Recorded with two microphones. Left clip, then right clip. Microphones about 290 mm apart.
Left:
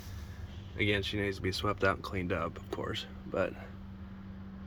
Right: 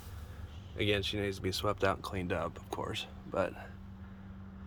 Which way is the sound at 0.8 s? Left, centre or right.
Centre.